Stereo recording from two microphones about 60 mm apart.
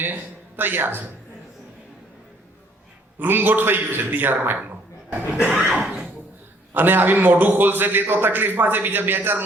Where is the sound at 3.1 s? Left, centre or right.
Right.